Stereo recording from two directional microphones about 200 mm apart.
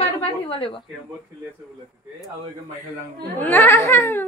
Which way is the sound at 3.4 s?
10° left (ahead or behind).